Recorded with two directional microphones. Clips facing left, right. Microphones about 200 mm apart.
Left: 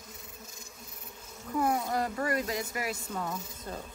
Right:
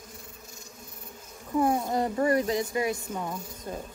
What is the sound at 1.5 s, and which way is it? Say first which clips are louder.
Speech: right 4 dB; 25° right (ahead or behind).